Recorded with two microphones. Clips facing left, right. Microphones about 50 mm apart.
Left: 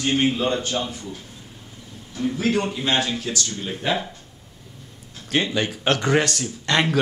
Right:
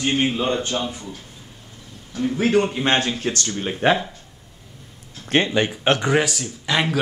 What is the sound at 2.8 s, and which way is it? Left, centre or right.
Speech, right.